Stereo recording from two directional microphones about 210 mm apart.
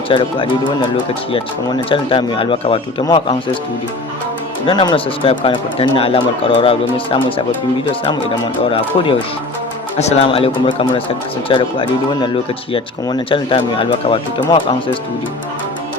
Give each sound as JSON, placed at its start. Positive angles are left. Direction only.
{"t": 0.1, "sound": "speech", "side_deg": 25}
{"t": 4.6, "sound": "speech", "side_deg": 20}
{"t": 10.0, "sound": "speech", "side_deg": 30}